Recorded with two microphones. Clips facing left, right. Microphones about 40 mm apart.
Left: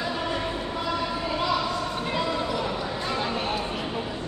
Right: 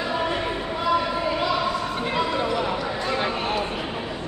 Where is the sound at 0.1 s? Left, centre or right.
Centre.